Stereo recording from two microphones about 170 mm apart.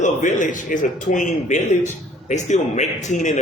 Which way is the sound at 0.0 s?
50° left (ahead or behind).